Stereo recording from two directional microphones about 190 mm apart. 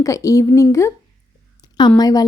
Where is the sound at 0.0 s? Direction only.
15° left (ahead or behind).